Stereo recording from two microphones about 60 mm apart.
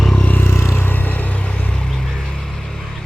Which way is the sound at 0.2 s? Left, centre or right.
Left.